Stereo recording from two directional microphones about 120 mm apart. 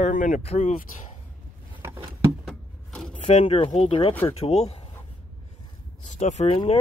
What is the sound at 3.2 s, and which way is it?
Speech, 60° left (ahead or behind).